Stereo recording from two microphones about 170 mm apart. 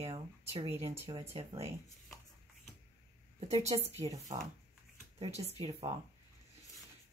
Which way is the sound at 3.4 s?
40° right (ahead or behind).